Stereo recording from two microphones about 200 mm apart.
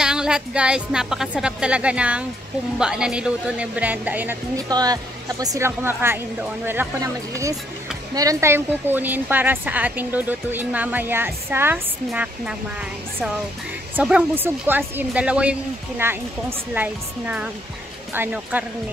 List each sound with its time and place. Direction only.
0.0 s speech: 5° right (ahead or behind)
13.9 s speech: 5° right (ahead or behind)